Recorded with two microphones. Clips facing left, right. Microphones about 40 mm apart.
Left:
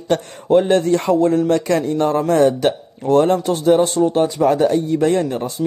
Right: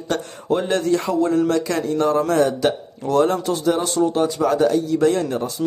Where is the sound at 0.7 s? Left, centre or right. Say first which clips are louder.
Left 4 dB; left.